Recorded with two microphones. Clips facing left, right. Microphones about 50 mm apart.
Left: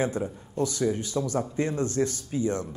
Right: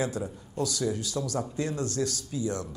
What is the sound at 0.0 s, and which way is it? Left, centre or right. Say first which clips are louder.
A man's voice: left 3 dB; left.